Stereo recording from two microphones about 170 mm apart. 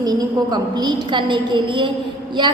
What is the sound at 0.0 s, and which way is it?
A woman's voice, 25° right (ahead or behind).